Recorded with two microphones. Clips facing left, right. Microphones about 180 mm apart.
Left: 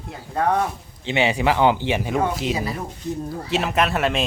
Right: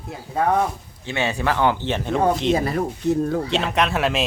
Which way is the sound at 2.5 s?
55° right (ahead or behind).